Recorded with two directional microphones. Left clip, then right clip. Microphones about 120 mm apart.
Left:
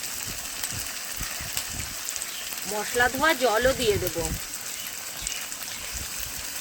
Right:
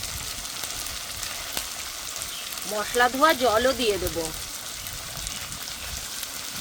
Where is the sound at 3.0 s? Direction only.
45° right (ahead or behind).